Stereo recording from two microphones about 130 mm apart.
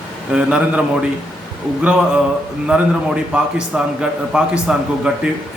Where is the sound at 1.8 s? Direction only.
10° right (ahead or behind).